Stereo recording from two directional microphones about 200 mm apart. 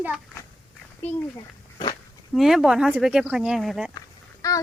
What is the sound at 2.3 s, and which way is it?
Speech, centre (ahead or behind).